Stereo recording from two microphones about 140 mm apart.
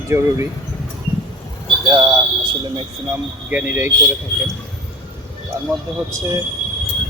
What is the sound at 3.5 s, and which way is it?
Speech, 10° right (ahead or behind).